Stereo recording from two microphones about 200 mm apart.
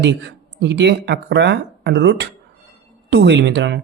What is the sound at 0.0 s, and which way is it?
Speech, 60° right (ahead or behind).